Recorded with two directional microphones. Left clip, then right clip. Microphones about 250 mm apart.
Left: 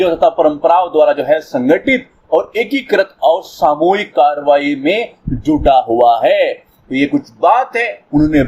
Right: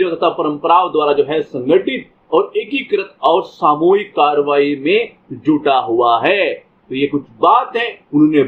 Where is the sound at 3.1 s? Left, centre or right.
Left.